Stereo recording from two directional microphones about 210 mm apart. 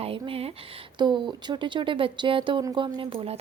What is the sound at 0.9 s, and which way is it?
Speech, 20° right (ahead or behind).